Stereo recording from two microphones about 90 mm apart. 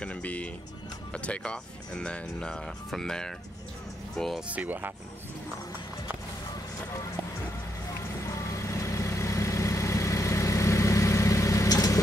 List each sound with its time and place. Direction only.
0.0 s vehicle: 15° left (ahead or behind)
1.1 s speech: 10° left (ahead or behind)
4.5 s speech: 20° right (ahead or behind)
8.4 s vehicle: 35° left (ahead or behind)